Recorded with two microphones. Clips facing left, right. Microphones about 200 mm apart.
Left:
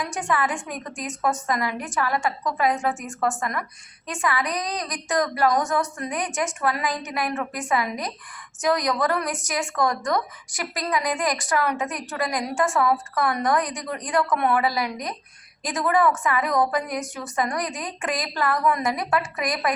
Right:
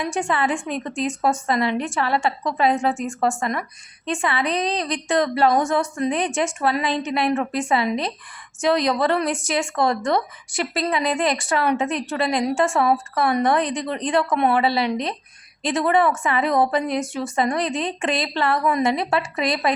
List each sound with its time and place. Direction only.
0.0 s a woman's voice: 25° right (ahead or behind)